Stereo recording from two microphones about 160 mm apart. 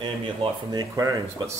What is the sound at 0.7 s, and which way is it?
Speech, 25° right (ahead or behind).